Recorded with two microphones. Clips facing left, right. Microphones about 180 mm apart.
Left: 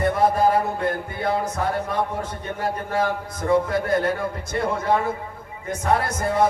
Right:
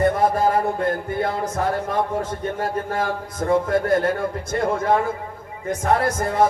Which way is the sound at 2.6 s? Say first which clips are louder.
Left 2 dB; 50° right (ahead or behind).